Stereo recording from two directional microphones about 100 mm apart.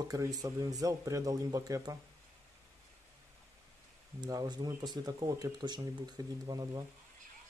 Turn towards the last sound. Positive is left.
turn(degrees=-40)  # may be behind; listen again after turning